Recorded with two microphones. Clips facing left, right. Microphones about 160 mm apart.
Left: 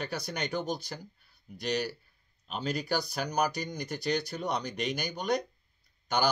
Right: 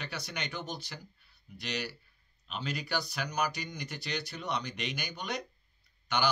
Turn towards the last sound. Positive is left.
turn(degrees=40)  # may be behind; listen again after turning